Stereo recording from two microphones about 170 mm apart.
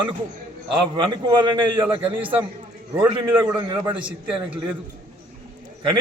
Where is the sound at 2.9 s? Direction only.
10° right (ahead or behind).